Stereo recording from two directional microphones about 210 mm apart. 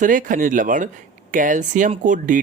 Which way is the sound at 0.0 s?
40° right (ahead or behind).